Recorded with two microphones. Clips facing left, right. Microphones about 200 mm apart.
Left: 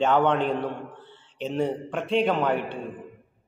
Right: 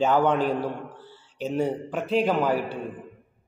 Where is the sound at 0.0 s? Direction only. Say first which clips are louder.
Even; 5° right (ahead or behind).